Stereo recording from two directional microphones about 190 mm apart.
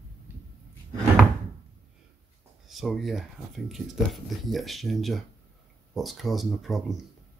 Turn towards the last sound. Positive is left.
turn(degrees=0)  # may be behind; listen again after turning